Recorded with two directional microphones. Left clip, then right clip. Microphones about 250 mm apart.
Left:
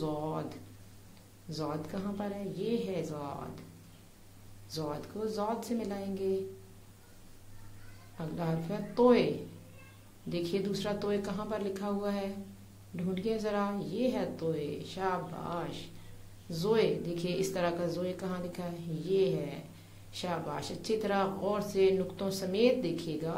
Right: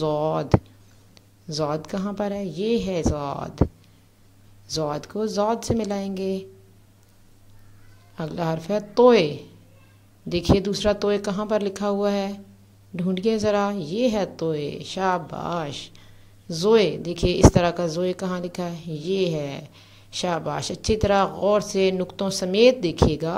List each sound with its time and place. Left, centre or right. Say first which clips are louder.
0.0 s speech: right 13 dB; right
1.5 s speech: right 11 dB; right
4.6 s speech: right 11 dB; right
8.2 s speech: right 10 dB; right
10.3 s speech: right 12 dB; right